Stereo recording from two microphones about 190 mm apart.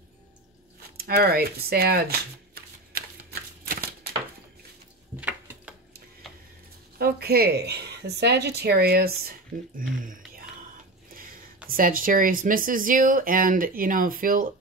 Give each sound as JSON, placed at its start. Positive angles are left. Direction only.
{"t": 0.9, "sound": "speech", "side_deg": -55}
{"t": 3.6, "sound": "typewriter", "side_deg": -50}
{"t": 7.0, "sound": "a woman's voice", "side_deg": -55}
{"t": 9.8, "sound": "a sound", "side_deg": -45}
{"t": 11.7, "sound": "speech", "side_deg": -45}